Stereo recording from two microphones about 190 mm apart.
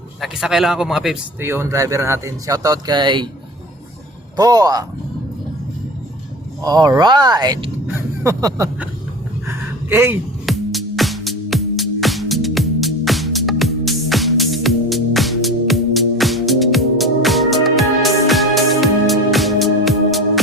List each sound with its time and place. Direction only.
0.2 s speech: centre (ahead or behind); by 3.2 s 25° right (ahead or behind)
4.4 s speech: 20° right (ahead or behind)
6.6 s speech: 20° right (ahead or behind)
9.5 s a sound: 15° right (ahead or behind)
10.4 s music: centre (ahead or behind)